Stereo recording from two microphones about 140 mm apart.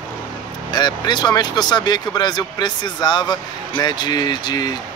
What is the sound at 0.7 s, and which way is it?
Speech, 30° left (ahead or behind).